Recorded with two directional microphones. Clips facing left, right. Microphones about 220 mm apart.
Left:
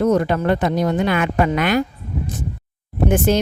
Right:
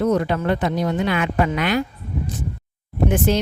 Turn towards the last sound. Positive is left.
turn(degrees=50)  # may be behind; listen again after turning